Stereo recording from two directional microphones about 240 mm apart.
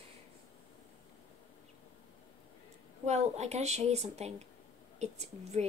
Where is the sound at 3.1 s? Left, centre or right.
Right.